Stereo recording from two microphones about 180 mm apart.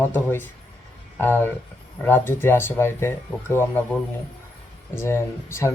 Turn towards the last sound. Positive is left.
turn(degrees=15)  # may be behind; listen again after turning